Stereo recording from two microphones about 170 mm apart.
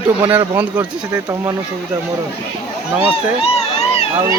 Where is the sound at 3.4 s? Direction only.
35° left (ahead or behind).